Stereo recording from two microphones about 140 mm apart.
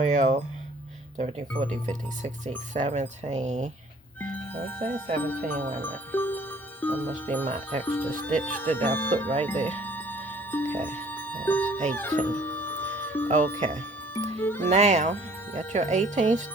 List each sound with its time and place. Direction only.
0.0 s speech: 60° right (ahead or behind)
2.7 s speech: 60° right (ahead or behind)
4.2 s speech: 15° left (ahead or behind)
9.4 s music: 10° left (ahead or behind)
11.9 s speech: 10° left (ahead or behind)
12.2 s music: 10° left (ahead or behind)
13.6 s speech: 60° right (ahead or behind)
14.1 s music: 15° left (ahead or behind)
14.7 s speech: 55° right (ahead or behind)